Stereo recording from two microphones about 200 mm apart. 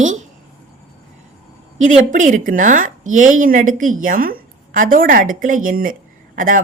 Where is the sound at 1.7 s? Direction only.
40° right (ahead or behind).